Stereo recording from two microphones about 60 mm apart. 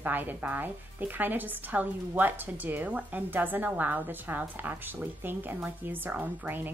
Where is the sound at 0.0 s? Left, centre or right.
Right.